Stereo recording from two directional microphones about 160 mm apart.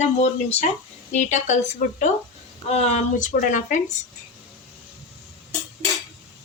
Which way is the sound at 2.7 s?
45° left (ahead or behind).